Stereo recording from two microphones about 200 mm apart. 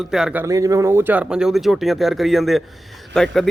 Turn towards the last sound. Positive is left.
turn(degrees=0)  # may be behind; listen again after turning